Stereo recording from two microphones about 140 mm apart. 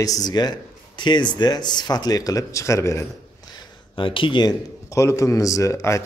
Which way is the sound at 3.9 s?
35° left (ahead or behind).